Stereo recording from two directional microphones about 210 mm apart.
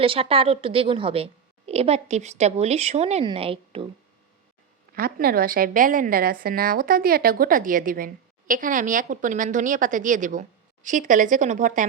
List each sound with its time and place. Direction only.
0.0 s a woman's voice: 25° right (ahead or behind)
4.9 s a woman's voice: 45° right (ahead or behind)